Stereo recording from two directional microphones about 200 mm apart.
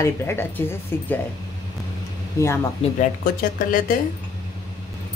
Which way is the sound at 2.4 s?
15° left (ahead or behind).